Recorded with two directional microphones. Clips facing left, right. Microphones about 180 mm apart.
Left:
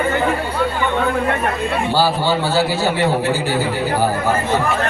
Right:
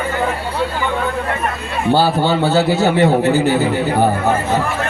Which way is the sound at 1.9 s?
55° right (ahead or behind).